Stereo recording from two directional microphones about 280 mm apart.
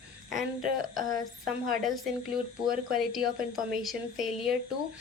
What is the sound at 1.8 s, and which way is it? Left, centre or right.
A woman's voice, centre.